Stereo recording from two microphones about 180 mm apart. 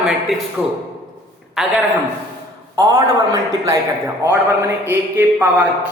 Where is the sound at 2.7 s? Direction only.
20° right (ahead or behind).